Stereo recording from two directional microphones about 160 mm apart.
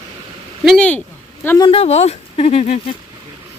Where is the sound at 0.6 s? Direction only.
Centre (ahead or behind).